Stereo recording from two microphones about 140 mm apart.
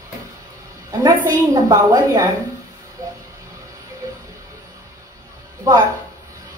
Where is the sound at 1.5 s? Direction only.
25° right (ahead or behind).